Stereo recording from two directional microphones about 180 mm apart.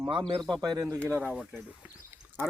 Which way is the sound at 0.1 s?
25° right (ahead or behind).